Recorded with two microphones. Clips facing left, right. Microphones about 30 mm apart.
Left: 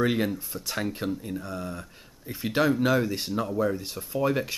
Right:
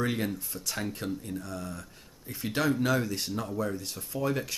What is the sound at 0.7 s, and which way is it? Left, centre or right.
Speech, centre.